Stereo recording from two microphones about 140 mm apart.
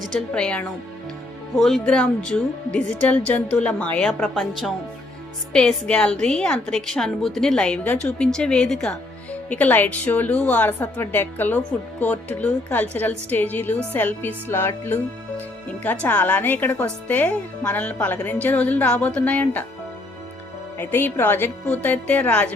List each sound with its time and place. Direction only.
0.1 s a woman's voice: 5° left (ahead or behind)
20.7 s speech: 15° left (ahead or behind)